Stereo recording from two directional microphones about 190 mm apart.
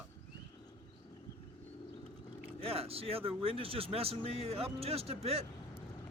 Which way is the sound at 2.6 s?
30° right (ahead or behind).